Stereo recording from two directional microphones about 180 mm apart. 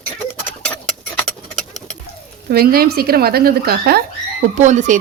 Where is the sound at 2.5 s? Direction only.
55° right (ahead or behind).